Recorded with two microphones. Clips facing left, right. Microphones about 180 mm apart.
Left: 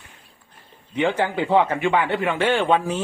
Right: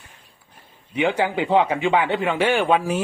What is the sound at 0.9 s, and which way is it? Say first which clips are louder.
A man's voice: even; 10° right (ahead or behind).